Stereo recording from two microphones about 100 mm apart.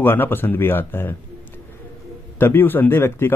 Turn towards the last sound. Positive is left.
turn(degrees=20)  # may be behind; listen again after turning